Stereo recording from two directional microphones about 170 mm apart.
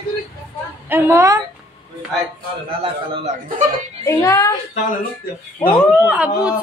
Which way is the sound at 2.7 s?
35° right (ahead or behind).